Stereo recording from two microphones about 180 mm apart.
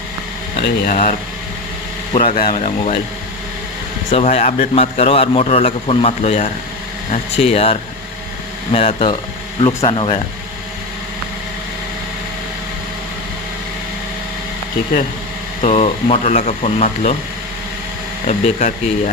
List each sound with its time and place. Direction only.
0.9 s speech: 45° left (ahead or behind)
2.1 s a man's voice: 35° left (ahead or behind)
2.4 s speech: 50° left (ahead or behind)
2.6 s a man's voice: 35° left (ahead or behind)
4.1 s a man's voice: 35° left (ahead or behind)
15.6 s a man's voice: 35° left (ahead or behind)
18.3 s a man's voice: 40° left (ahead or behind)